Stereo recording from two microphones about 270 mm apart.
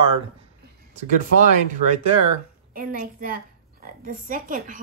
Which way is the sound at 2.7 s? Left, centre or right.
Right.